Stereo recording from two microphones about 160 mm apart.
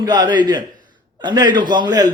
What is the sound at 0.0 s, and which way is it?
A man's voice, 25° right (ahead or behind).